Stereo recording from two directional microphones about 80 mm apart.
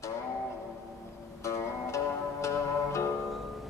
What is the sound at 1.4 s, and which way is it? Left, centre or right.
Music, left.